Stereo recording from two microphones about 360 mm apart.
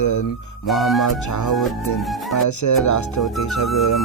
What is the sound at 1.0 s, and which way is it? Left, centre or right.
Speech, left.